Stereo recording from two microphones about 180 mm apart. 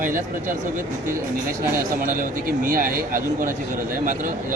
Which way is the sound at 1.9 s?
50° right (ahead or behind).